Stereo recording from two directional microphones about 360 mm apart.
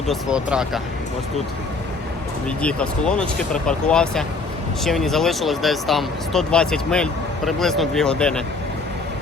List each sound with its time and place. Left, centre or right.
0.1 s speech: centre
2.6 s speech: centre